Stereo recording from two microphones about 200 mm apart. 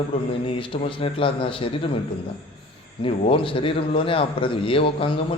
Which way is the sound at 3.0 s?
25° left (ahead or behind).